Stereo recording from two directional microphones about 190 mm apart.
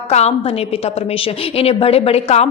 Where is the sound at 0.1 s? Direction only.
35° left (ahead or behind).